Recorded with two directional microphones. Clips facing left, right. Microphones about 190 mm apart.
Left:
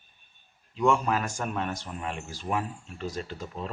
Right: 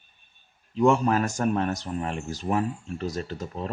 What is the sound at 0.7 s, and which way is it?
Speech, 40° right (ahead or behind).